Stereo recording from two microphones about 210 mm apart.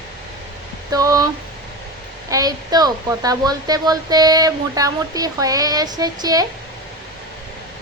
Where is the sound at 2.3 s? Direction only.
15° right (ahead or behind).